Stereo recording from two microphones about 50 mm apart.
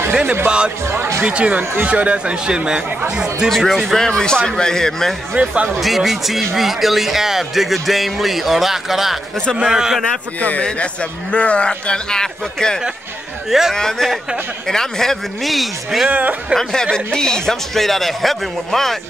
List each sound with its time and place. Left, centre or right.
0.1 s music: right
0.8 s speech: right
1.2 s speech: right
3.4 s speech: centre
5.3 s speech: right
5.8 s speech: centre
10.6 s a man's voice: left
13.5 s speech: centre
13.7 s speech: centre
16.1 s speech: right
16.5 s speech: centre